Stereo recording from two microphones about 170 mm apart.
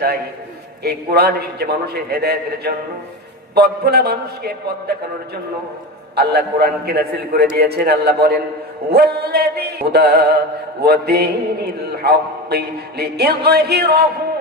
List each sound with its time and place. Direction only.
0.8 s mantra: 70° right (ahead or behind)
6.1 s mantra: 65° right (ahead or behind)